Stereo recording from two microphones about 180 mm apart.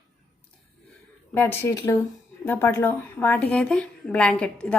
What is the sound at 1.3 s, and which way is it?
Speech, 10° left (ahead or behind).